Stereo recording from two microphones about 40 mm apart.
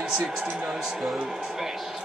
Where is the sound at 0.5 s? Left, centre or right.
Centre.